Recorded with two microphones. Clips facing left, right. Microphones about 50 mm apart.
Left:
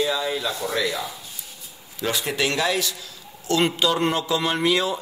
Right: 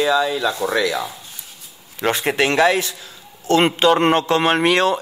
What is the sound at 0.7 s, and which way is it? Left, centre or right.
Speech, right.